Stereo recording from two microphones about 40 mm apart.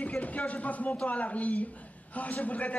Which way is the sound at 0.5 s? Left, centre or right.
Left.